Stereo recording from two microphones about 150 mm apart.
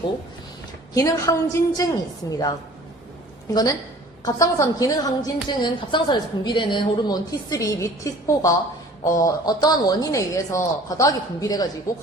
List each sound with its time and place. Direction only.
0.9 s a woman's voice: 20° left (ahead or behind)